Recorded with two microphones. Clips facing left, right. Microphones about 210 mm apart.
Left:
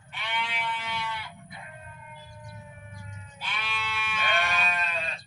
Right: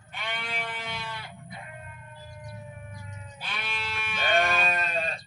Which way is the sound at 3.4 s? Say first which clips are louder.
Left 1 dB; 40° right (ahead or behind).